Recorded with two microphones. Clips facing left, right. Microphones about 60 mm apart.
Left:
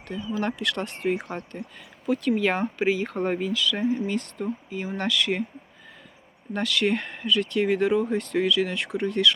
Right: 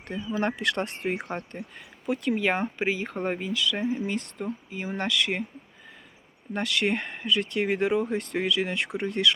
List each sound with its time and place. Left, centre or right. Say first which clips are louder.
0.3 s speech: right 1 dB; right
1.0 s speech: left 3 dB; centre
6.5 s speech: left 2 dB; centre